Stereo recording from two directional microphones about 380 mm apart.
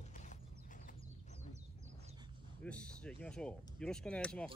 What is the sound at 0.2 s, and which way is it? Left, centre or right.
Horse, centre.